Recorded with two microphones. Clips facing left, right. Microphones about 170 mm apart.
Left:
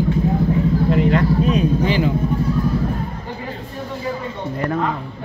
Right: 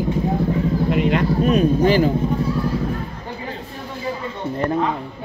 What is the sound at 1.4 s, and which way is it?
Speech, 50° right (ahead or behind).